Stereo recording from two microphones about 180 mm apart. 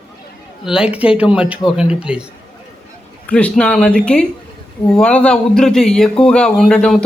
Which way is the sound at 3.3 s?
5° left (ahead or behind).